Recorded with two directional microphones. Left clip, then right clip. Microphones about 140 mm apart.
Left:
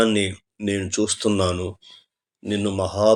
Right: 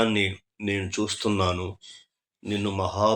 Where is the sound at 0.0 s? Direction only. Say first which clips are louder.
Left 4 dB; 45° left (ahead or behind).